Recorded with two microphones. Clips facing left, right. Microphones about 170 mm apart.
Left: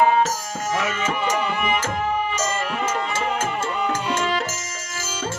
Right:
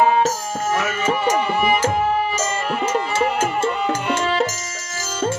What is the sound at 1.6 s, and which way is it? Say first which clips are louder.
Music: right 5 dB; 35° right (ahead or behind).